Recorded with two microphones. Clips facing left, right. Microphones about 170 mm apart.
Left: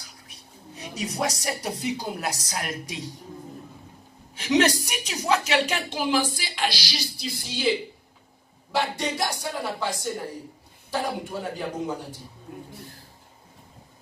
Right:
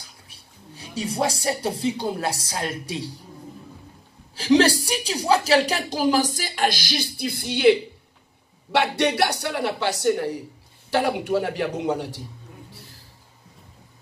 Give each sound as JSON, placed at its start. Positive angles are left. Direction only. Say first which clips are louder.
{"t": 0.3, "sound": "a woman's voice", "louder": "left 2 dB", "side_deg": -30}
{"t": 4.4, "sound": "a woman's voice", "louder": "right 4 dB", "side_deg": -30}